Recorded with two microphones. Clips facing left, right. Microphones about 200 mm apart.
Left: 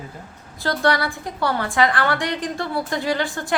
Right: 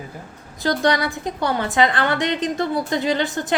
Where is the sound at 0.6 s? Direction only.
20° right (ahead or behind).